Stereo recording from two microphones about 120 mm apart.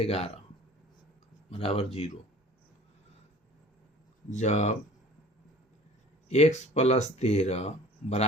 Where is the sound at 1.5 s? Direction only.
55° left (ahead or behind).